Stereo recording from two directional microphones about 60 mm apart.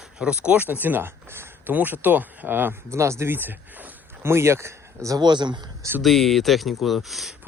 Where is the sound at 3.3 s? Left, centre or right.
Right.